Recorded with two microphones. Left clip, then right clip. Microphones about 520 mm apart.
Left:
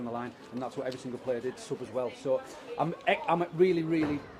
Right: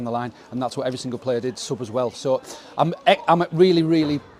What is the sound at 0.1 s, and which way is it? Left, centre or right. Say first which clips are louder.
Speech: right 10 dB; right.